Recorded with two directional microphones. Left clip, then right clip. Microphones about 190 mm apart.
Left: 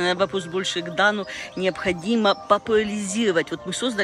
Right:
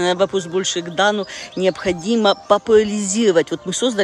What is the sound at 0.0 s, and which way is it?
Speech, 30° right (ahead or behind).